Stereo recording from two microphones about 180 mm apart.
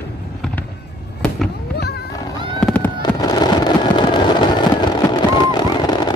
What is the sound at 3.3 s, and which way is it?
Fireworks, 25° left (ahead or behind).